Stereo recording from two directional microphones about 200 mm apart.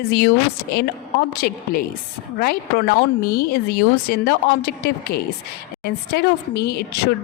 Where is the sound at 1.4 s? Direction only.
50° left (ahead or behind).